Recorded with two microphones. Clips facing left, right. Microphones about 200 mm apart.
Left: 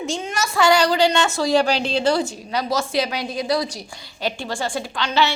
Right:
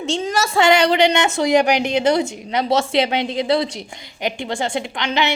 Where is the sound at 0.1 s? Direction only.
30° right (ahead or behind).